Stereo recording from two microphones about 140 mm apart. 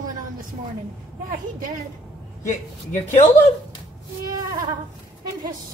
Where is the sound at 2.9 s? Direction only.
65° left (ahead or behind).